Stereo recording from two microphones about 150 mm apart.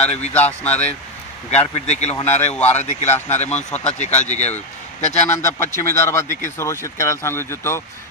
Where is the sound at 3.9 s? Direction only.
50° left (ahead or behind).